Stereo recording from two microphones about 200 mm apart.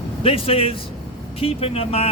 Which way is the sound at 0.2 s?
30° left (ahead or behind).